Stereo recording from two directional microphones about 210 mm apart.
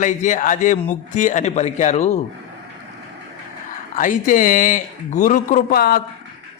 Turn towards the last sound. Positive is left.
turn(degrees=45)  # may be behind; listen again after turning